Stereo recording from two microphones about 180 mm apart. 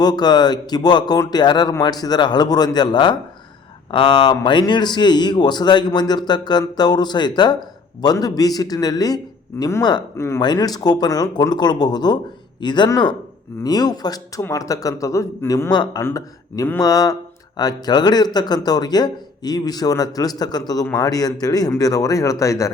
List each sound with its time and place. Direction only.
0.0 s a man's voice: 20° left (ahead or behind)